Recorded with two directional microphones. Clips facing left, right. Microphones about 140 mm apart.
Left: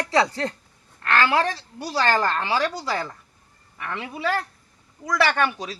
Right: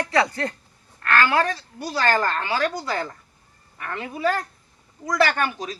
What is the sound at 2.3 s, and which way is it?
Speech, 20° left (ahead or behind).